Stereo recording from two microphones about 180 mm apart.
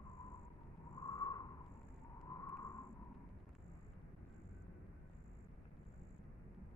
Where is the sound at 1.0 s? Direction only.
20° left (ahead or behind).